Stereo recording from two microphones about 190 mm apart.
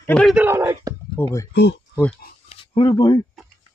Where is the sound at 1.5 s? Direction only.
65° left (ahead or behind).